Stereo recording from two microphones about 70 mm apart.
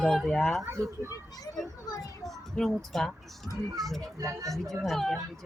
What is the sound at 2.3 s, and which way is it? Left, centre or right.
Speech, centre.